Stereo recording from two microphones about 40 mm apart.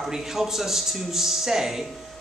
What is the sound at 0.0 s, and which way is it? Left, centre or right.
Speech, centre.